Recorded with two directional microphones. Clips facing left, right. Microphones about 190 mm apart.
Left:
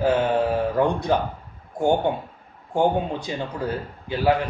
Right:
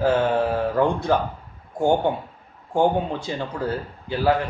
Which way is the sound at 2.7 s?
15° left (ahead or behind).